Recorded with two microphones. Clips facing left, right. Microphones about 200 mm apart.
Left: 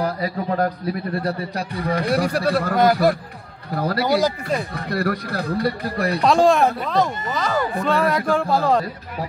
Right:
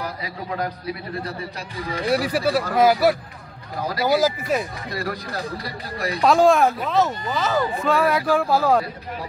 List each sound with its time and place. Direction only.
0.0 s a man's voice: 45° left (ahead or behind)
1.2 s a man's voice: 60° left (ahead or behind)
2.2 s speech: 5° right (ahead or behind)
3.7 s a man's voice: 60° left (ahead or behind)
4.0 s speech: 5° right (ahead or behind)
4.7 s a man's voice: 60° left (ahead or behind)
6.2 s speech: centre (ahead or behind)